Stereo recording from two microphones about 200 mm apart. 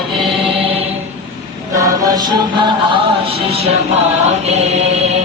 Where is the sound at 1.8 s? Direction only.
20° right (ahead or behind).